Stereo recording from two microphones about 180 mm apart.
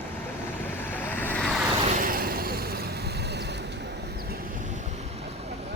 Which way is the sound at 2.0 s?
55° right (ahead or behind).